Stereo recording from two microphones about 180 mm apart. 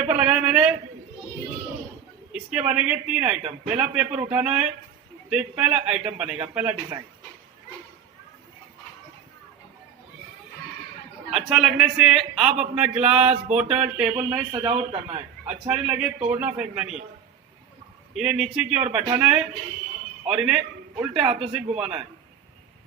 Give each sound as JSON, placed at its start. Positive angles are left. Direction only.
{"t": 0.1, "sound": "a sound", "side_deg": -5}
{"t": 2.3, "sound": "a woman's voice", "side_deg": -5}
{"t": 11.3, "sound": "a man's voice", "side_deg": 0}
{"t": 13.2, "sound": "a man's voice", "side_deg": -35}
{"t": 13.6, "sound": "a man's voice", "side_deg": -5}
{"t": 14.5, "sound": "a man's voice", "side_deg": -30}
{"t": 15.4, "sound": "a man's voice", "side_deg": -5}
{"t": 18.1, "sound": "a man's voice", "side_deg": 0}